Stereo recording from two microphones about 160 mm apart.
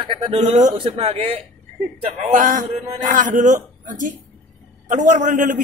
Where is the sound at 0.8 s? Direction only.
35° right (ahead or behind).